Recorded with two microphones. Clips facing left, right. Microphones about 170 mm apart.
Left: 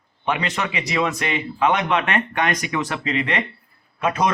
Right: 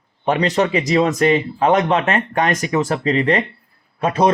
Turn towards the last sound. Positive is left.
turn(degrees=-30)  # may be behind; listen again after turning